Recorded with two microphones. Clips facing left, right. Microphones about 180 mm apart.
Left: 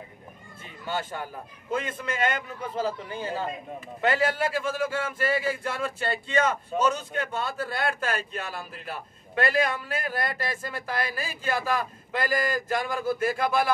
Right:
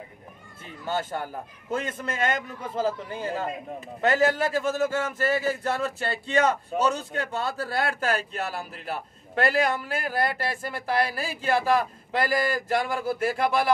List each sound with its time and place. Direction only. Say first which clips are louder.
0.8 s a man's voice: right 3 dB; 45° right (ahead or behind)